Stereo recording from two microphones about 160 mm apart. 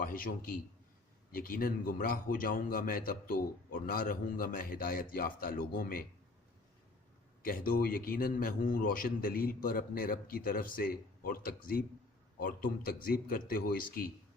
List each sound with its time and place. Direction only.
0.0 s a man's voice: 60° left (ahead or behind)
7.4 s a man's voice: 65° left (ahead or behind)